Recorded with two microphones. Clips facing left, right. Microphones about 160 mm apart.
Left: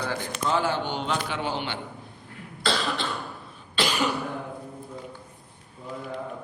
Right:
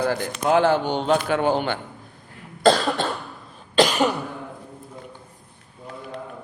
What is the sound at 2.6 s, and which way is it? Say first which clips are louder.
Cough: right 9 dB; 50° right (ahead or behind).